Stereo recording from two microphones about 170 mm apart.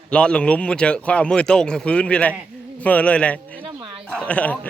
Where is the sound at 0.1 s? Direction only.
5° left (ahead or behind).